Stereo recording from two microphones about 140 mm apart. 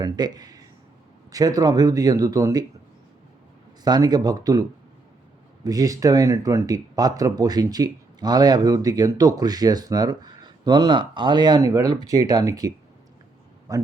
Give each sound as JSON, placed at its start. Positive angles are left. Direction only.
{"t": 0.0, "sound": "speech", "side_deg": -30}
{"t": 3.8, "sound": "speech", "side_deg": -30}
{"t": 5.6, "sound": "speech", "side_deg": -25}